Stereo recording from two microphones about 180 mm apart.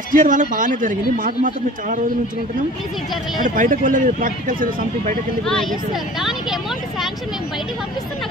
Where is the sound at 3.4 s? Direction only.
45° right (ahead or behind).